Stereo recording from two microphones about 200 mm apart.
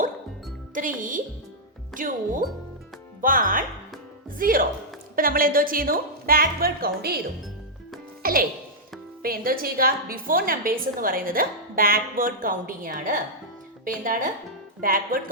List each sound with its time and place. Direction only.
0.7 s a woman's voice: 40° right (ahead or behind)
8.2 s a woman's voice: 45° right (ahead or behind)